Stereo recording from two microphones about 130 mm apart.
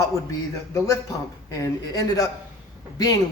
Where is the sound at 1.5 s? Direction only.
25° left (ahead or behind).